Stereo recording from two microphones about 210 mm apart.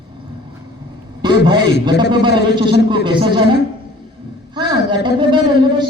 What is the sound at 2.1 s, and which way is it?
A woman's voice, 20° right (ahead or behind).